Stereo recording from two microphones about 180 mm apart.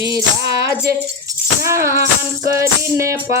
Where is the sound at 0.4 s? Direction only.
70° right (ahead or behind).